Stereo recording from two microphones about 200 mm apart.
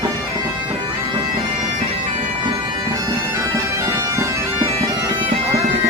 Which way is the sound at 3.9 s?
15° right (ahead or behind).